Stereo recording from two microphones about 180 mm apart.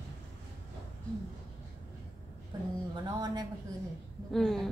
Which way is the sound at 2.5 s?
20° right (ahead or behind).